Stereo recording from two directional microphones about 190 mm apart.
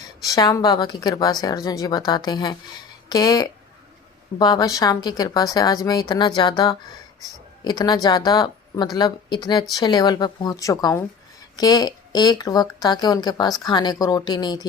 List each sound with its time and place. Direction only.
0.2 s speech: 20° left (ahead or behind)